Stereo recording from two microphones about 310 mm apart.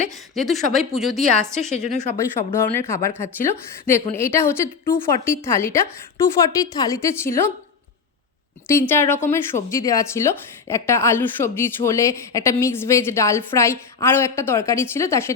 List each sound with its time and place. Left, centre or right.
0.3 s a woman's voice: centre
1.7 s speech: left
2.1 s speech: centre
8.6 s speech: centre